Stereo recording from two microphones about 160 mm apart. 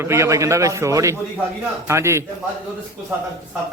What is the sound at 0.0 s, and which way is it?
A man's voice, 15° right (ahead or behind).